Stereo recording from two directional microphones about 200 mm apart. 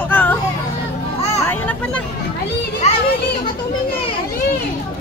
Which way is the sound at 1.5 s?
5° left (ahead or behind).